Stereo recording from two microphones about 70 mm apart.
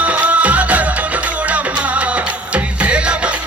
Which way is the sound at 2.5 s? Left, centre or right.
Centre.